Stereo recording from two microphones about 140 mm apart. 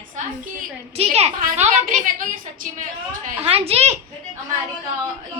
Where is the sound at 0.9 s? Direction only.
50° right (ahead or behind).